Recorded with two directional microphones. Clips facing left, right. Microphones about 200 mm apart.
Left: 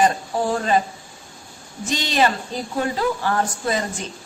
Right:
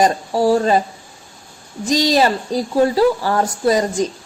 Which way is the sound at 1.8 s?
35° right (ahead or behind).